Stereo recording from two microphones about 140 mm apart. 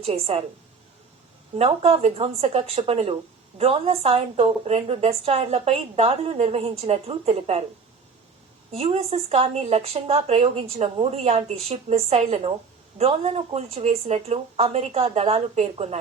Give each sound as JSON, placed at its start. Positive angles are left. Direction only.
{"t": 0.0, "sound": "a woman's voice", "side_deg": -45}
{"t": 1.5, "sound": "a woman's voice", "side_deg": -50}
{"t": 8.7, "sound": "a woman's voice", "side_deg": -45}